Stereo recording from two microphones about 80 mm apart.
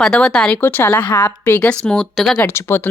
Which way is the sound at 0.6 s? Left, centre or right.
Left.